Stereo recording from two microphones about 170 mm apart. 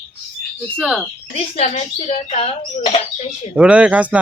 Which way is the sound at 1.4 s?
40° left (ahead or behind).